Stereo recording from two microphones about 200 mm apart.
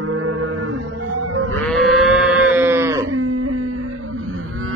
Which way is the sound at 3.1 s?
85° right.